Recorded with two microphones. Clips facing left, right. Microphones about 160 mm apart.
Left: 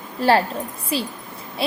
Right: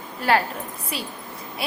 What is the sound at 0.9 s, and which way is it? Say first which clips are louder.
Speech: left 8 dB; 30° left (ahead or behind).